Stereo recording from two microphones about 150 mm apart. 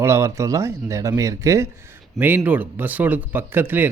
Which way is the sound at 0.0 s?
20° right (ahead or behind).